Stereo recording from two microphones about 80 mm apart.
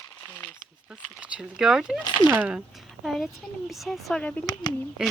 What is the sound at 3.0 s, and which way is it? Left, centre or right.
Speech, centre.